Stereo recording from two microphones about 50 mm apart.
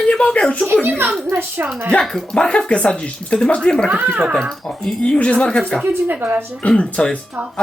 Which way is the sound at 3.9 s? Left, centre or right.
Right.